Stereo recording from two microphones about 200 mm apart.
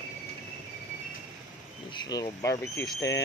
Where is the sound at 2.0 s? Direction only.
20° left (ahead or behind).